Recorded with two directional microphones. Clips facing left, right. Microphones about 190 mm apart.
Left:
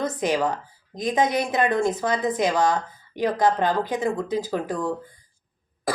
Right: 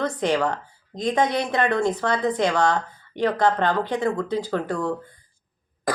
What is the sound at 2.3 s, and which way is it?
Speech, 15° left (ahead or behind).